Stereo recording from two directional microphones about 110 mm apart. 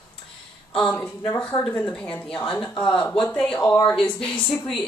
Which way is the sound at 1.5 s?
40° left (ahead or behind).